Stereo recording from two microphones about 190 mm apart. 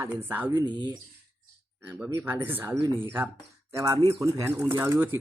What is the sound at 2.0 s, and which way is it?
Speech, 10° right (ahead or behind).